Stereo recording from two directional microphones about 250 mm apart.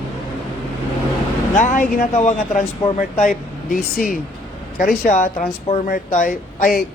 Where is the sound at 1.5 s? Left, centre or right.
Left.